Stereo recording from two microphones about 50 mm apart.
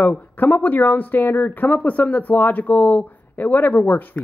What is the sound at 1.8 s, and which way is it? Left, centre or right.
Speech, left.